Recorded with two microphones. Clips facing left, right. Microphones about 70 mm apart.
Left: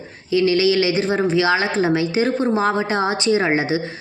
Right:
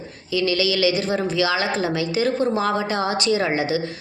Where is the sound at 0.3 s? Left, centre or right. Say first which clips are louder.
Left 5 dB; left.